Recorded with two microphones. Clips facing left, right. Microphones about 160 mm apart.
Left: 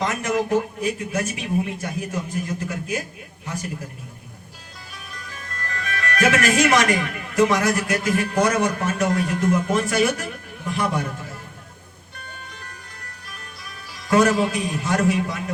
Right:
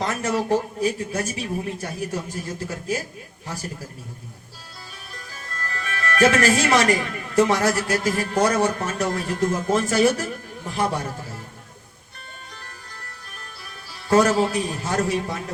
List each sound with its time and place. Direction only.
0.0 s a man's voice: 35° right (ahead or behind)
5.1 s speech: 35° right (ahead or behind)
13.9 s speech: 35° right (ahead or behind)